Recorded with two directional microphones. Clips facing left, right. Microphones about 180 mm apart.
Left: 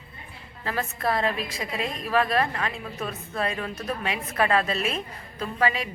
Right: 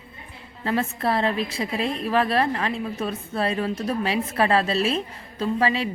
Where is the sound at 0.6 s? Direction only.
30° right (ahead or behind).